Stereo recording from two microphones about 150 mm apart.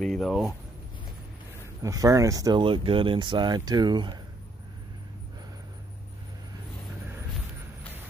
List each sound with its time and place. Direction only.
0.0 s speech: centre (ahead or behind)
1.8 s speech: 25° right (ahead or behind)